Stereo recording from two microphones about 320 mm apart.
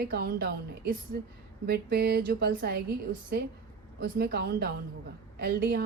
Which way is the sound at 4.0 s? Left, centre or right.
Right.